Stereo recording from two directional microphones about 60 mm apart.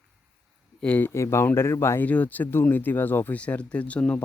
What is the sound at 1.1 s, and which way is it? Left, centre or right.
Speech, left.